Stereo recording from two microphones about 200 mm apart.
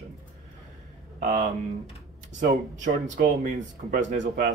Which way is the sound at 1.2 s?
35° right (ahead or behind).